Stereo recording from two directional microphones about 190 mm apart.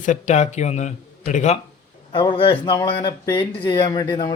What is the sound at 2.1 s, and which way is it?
A man's voice, 25° left (ahead or behind).